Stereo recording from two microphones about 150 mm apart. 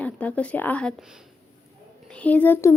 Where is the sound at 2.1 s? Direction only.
10° left (ahead or behind).